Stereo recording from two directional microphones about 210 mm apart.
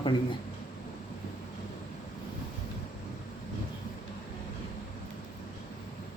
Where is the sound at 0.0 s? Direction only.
20° left (ahead or behind).